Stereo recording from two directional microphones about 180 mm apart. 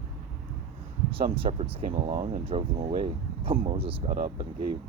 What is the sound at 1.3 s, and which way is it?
Speech, 35° right (ahead or behind).